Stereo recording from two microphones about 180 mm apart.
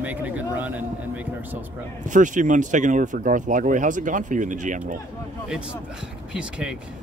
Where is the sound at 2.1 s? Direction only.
45° right (ahead or behind).